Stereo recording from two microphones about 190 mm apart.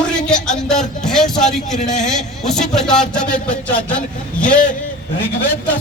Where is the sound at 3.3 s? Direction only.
45° left (ahead or behind).